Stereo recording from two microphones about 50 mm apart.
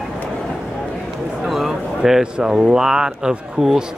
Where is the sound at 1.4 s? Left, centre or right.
Centre.